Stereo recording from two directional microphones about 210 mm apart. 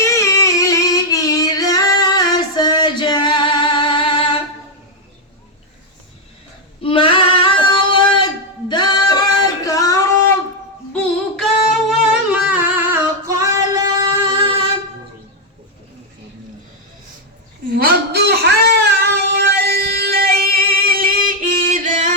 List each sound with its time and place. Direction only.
0.0 s singing: 15° left (ahead or behind)
6.8 s female singing: 25° left (ahead or behind)
8.7 s singing: 20° left (ahead or behind)
10.9 s music: centre (ahead or behind); by 14.5 s 15° right (ahead or behind)
17.7 s a sound: 45° right (ahead or behind)
19.1 s music: 50° right (ahead or behind)